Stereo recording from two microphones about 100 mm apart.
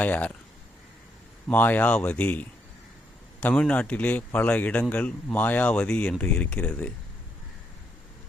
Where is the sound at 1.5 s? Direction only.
15° left (ahead or behind).